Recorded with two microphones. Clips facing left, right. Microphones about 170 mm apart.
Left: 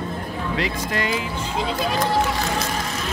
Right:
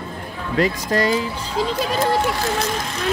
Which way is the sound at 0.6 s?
40° right (ahead or behind).